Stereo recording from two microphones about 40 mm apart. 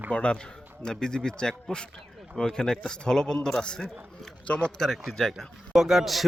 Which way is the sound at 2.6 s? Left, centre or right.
Centre.